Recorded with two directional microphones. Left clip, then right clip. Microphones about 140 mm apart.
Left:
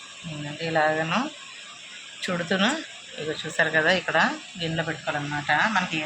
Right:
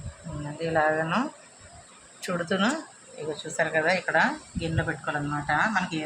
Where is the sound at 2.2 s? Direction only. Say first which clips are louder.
Left 2 dB; 5° left (ahead or behind).